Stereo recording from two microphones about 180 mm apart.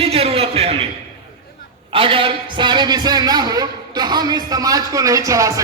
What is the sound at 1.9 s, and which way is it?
A man's voice, 30° right (ahead or behind).